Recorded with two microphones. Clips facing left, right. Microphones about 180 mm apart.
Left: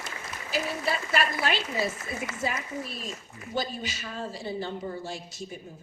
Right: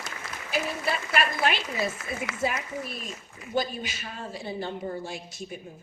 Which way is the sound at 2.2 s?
55° right (ahead or behind).